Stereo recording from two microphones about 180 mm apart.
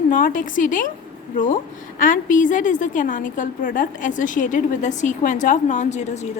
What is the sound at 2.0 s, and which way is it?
A woman's voice, 50° left (ahead or behind).